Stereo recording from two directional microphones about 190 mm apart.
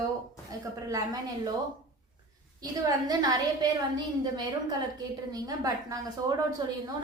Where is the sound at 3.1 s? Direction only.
20° right (ahead or behind).